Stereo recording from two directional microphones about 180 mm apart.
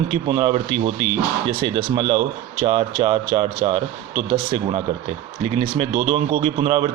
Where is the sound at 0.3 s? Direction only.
30° right (ahead or behind).